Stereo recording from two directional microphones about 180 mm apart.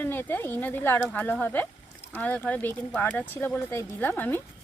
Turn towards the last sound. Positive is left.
turn(degrees=10)  # may be behind; listen again after turning